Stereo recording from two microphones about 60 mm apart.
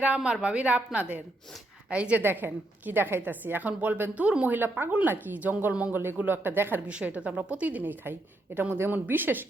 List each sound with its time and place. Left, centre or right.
0.4 s a woman's voice: centre; by 6.8 s right
6.8 s a woman's voice: right